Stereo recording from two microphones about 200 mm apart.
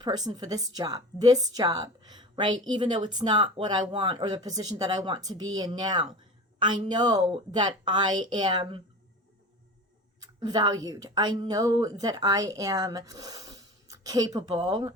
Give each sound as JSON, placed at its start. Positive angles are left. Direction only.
{"t": 0.0, "sound": "a woman's voice", "side_deg": -20}
{"t": 10.2, "sound": "a sound", "side_deg": -20}
{"t": 10.8, "sound": "a woman's voice", "side_deg": -20}